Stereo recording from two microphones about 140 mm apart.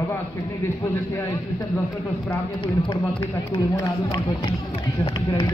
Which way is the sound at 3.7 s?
25° left (ahead or behind).